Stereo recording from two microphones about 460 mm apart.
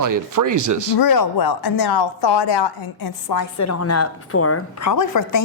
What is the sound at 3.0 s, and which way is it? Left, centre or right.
A woman's voice, left.